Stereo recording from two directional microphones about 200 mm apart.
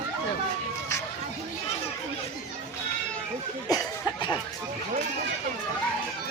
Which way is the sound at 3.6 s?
20° left (ahead or behind).